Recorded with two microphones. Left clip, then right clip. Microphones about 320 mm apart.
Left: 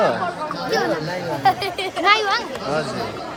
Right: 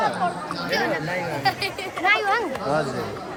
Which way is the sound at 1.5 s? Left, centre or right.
Left.